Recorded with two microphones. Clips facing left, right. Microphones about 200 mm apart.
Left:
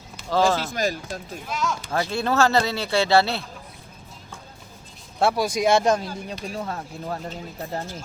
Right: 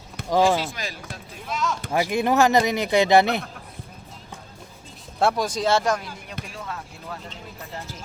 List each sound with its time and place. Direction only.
0.3 s speech: 15° right (ahead or behind)
0.7 s speech: 45° left (ahead or behind)
1.5 s speech: centre (ahead or behind)
1.9 s speech: 15° right (ahead or behind)
5.2 s speech: 10° left (ahead or behind)
6.5 s speech: 40° left (ahead or behind)